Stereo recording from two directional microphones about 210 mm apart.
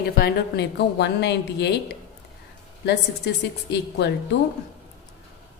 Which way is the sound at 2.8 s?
55° left (ahead or behind).